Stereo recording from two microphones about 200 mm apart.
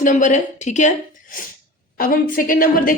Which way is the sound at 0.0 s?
40° left (ahead or behind).